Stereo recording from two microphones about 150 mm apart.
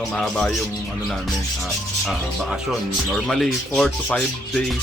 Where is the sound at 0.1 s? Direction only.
5° left (ahead or behind).